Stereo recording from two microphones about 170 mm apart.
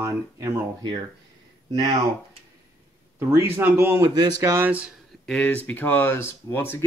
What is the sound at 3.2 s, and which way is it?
Speech, 15° right (ahead or behind).